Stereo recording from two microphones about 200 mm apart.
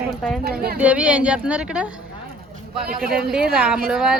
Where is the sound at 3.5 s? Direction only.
5° right (ahead or behind).